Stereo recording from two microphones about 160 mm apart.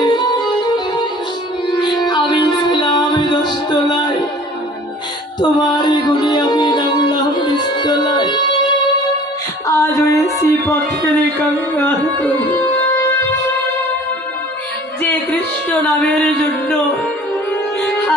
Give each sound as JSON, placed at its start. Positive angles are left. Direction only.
{"t": 0.0, "sound": "music", "side_deg": 25}
{"t": 1.7, "sound": "music", "side_deg": 25}
{"t": 5.4, "sound": "music", "side_deg": 25}
{"t": 9.7, "sound": "music", "side_deg": 20}
{"t": 11.3, "sound": "carnatic music", "side_deg": 15}
{"t": 15.0, "sound": "a sound", "side_deg": 10}